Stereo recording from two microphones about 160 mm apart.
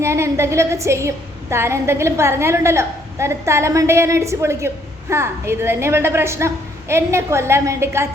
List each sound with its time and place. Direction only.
0.0 s a woman's voice: 15° right (ahead or behind)